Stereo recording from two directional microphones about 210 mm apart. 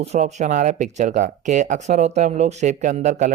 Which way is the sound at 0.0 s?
30° right (ahead or behind).